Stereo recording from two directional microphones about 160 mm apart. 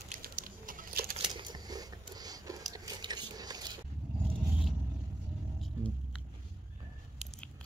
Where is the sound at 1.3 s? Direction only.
25° right (ahead or behind).